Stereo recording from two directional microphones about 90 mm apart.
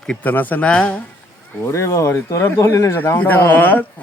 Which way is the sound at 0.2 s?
20° left (ahead or behind).